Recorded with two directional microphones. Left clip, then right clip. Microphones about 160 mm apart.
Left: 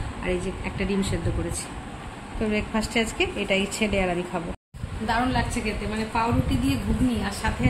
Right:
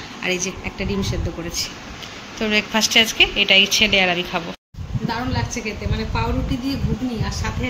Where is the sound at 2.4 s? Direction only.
10° right (ahead or behind).